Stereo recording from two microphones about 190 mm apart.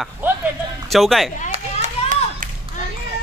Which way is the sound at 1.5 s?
40° right (ahead or behind).